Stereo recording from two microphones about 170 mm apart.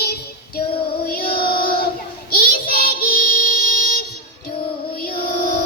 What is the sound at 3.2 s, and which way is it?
Music, 60° left (ahead or behind).